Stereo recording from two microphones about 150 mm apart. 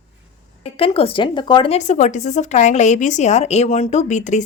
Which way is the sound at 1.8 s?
55° left (ahead or behind).